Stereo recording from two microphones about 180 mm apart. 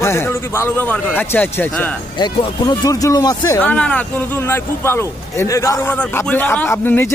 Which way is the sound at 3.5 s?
5° left (ahead or behind).